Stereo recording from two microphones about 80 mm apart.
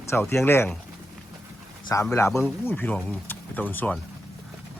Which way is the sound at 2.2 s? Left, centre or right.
Left.